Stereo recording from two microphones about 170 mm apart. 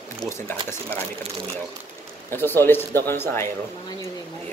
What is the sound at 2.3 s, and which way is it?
A man's voice, 10° left (ahead or behind).